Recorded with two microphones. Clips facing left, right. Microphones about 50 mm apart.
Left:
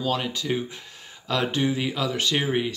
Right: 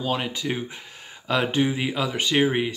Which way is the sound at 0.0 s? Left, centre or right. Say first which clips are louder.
Even; centre.